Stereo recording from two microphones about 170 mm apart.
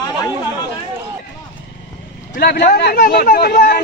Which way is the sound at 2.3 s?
70° left (ahead or behind).